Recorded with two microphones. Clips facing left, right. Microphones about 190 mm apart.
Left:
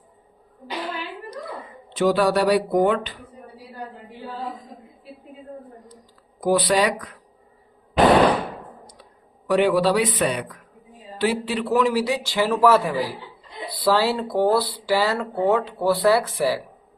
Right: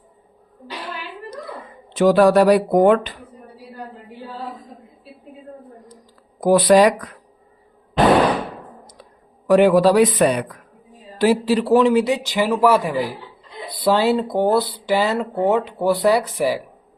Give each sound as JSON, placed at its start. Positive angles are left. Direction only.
{"t": 2.0, "sound": "speech", "side_deg": -50}
{"t": 6.4, "sound": "speech", "side_deg": -50}
{"t": 9.5, "sound": "speech", "side_deg": -45}